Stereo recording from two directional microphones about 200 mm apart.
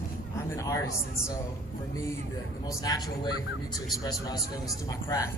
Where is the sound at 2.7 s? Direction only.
15° left (ahead or behind).